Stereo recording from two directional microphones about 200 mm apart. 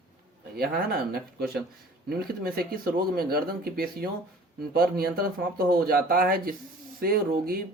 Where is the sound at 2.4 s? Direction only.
50° right (ahead or behind).